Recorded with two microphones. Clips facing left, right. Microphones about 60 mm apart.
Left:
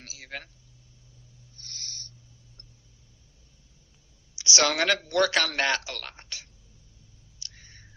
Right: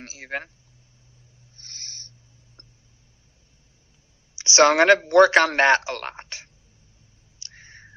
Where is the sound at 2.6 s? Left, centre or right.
Right.